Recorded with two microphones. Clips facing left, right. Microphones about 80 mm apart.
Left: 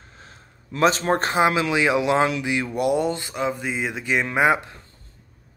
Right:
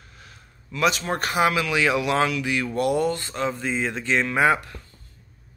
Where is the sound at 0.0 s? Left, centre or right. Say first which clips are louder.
Left 2 dB; left.